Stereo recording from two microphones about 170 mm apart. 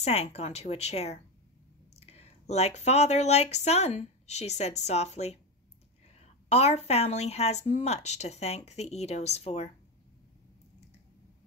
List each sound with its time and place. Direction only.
0.0 s a woman's voice: 40° left (ahead or behind)